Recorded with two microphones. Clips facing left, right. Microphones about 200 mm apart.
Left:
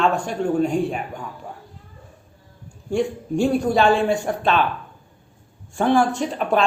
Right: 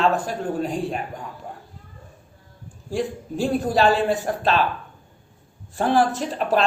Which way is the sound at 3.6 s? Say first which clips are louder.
Right 2 dB; 35° right (ahead or behind).